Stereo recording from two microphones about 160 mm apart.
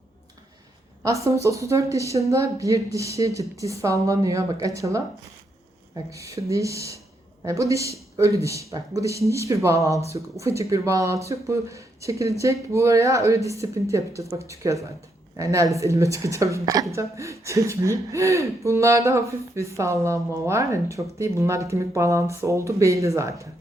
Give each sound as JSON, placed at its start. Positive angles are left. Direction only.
{"t": 1.0, "sound": "speech", "side_deg": -20}